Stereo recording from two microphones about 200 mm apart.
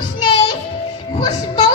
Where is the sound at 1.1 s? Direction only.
20° left (ahead or behind).